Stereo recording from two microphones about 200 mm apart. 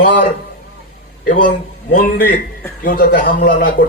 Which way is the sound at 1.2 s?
40° left (ahead or behind).